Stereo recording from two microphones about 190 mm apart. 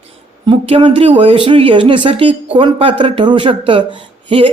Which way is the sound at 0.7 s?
30° right (ahead or behind).